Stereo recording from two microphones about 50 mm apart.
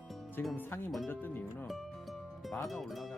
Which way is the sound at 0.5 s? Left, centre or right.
Left.